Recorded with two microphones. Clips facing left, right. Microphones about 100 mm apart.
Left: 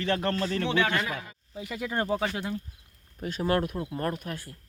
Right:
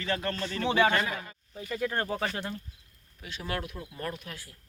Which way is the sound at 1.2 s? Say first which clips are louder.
Left 2 dB; 5° left (ahead or behind).